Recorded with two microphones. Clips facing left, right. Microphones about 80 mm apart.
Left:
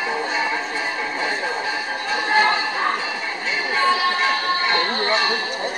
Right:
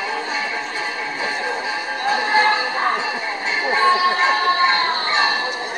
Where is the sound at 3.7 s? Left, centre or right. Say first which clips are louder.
Right 3 dB; right.